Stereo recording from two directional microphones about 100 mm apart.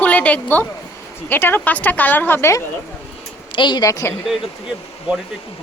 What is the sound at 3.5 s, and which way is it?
Speech, 50° left (ahead or behind).